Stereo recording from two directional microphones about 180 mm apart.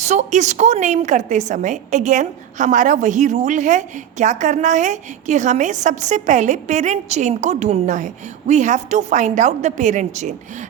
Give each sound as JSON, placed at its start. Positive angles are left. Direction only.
{"t": 0.0, "sound": "a woman's voice", "side_deg": -40}